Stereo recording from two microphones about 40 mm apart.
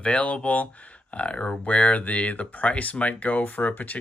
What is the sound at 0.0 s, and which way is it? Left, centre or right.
Speech, left.